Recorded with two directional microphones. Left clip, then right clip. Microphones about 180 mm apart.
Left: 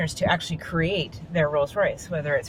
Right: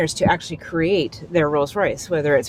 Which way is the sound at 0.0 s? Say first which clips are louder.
Right 6 dB; 30° right (ahead or behind).